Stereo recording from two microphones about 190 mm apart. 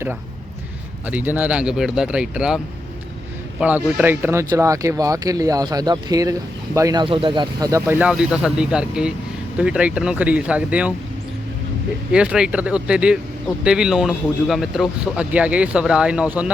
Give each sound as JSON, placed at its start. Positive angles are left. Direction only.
{"t": 1.0, "sound": "speech", "side_deg": -10}
{"t": 3.6, "sound": "speech", "side_deg": -5}
{"t": 12.1, "sound": "speech", "side_deg": -5}